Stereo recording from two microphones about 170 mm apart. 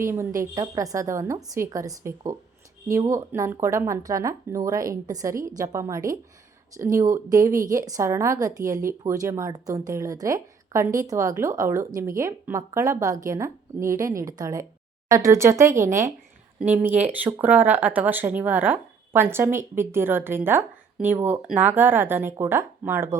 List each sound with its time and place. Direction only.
0.0 s speech: 15° right (ahead or behind)